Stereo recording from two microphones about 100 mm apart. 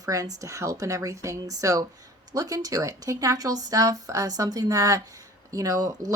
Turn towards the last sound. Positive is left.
turn(degrees=-40)  # may be behind; listen again after turning